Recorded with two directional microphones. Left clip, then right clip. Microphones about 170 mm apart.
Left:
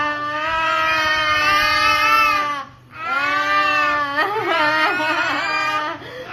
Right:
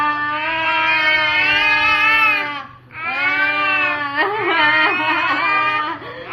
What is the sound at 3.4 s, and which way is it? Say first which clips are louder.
Cat: left 1 dB; 15° left (ahead or behind).